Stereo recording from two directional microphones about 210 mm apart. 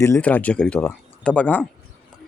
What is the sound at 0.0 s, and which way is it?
Speech, 10° left (ahead or behind).